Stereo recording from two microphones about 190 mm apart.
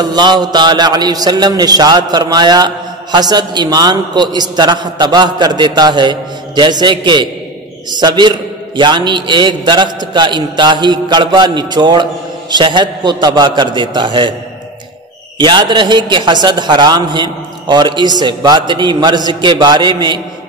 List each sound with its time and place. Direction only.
0.0 s a man's voice: 20° right (ahead or behind)
15.3 s a man's voice: 25° right (ahead or behind)